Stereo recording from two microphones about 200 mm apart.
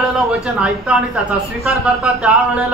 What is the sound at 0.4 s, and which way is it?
A woman's voice, 5° right (ahead or behind).